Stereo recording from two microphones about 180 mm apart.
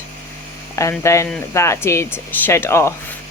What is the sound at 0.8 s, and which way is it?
Speech, 15° left (ahead or behind).